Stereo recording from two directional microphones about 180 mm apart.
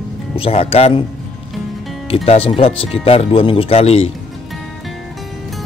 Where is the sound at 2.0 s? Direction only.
35° left (ahead or behind).